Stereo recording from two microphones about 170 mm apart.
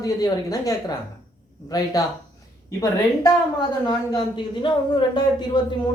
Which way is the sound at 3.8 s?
25° left (ahead or behind).